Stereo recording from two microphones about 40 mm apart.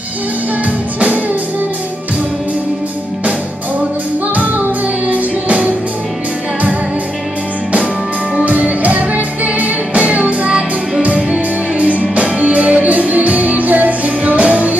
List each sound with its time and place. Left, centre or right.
0.9 s music: right
5.0 s music: right
8.5 s music: right
12.2 s music: right